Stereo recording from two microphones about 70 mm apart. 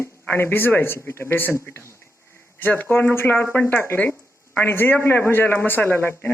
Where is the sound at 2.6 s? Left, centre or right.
Left.